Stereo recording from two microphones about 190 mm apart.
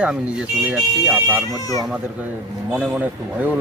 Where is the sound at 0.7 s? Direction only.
5° right (ahead or behind).